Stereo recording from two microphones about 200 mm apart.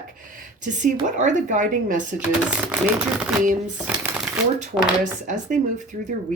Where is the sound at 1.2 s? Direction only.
40° right (ahead or behind).